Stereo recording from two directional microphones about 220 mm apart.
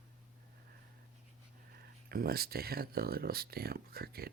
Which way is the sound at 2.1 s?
45° right (ahead or behind).